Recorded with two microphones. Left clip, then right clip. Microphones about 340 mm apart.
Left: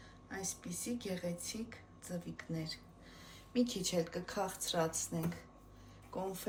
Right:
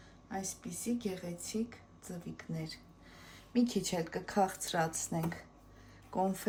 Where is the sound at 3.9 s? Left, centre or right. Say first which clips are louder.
Even; right.